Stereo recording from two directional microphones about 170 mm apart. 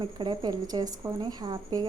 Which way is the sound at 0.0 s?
30° right (ahead or behind).